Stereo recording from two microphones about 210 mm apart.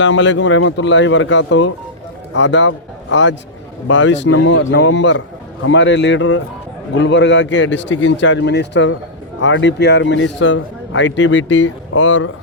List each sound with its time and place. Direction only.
0.0 s a man's voice: 60° left (ahead or behind)